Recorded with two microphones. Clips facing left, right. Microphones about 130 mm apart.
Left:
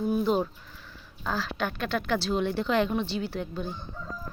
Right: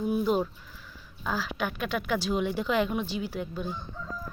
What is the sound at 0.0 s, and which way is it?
Speech, 10° right (ahead or behind).